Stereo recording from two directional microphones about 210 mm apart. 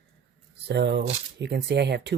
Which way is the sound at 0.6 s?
55° right (ahead or behind).